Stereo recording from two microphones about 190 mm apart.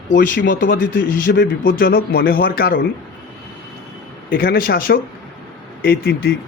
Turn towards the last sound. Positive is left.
turn(degrees=55)  # may be behind; listen again after turning